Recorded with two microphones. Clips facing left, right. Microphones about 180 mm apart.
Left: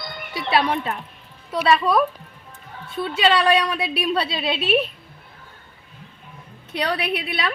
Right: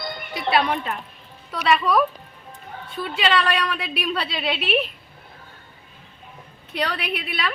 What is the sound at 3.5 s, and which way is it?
Speech, 25° left (ahead or behind).